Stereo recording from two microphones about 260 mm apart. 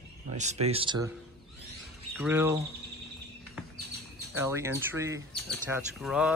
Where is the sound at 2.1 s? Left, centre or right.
Centre.